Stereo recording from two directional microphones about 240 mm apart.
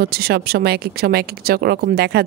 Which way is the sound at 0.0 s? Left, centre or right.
Right.